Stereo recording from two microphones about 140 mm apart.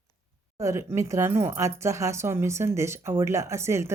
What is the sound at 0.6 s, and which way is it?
Speech, 20° right (ahead or behind).